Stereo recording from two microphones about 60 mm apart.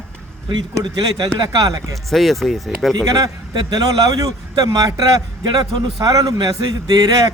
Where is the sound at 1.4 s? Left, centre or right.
Right.